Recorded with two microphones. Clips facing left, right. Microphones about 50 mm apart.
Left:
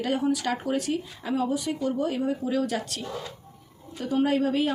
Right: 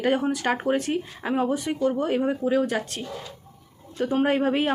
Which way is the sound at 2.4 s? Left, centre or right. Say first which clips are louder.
Right 4 dB; right.